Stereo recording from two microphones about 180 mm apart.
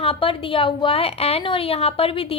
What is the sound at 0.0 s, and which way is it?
A woman's voice, 30° left (ahead or behind).